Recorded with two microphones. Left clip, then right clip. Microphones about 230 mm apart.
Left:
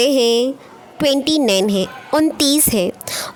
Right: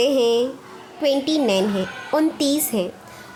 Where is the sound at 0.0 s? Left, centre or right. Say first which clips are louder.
Left 3 dB; left.